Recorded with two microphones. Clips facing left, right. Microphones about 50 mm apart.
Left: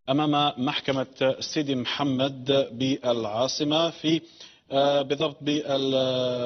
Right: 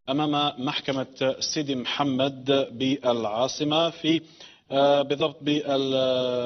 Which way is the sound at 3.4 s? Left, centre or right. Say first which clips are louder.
Even; centre.